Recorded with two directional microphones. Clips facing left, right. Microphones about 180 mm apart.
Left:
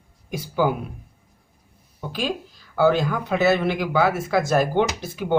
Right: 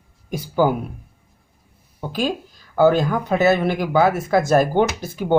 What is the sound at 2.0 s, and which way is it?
Speech, 40° right (ahead or behind).